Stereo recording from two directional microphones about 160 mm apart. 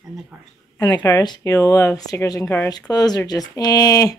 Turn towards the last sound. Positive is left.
turn(degrees=20)  # may be behind; listen again after turning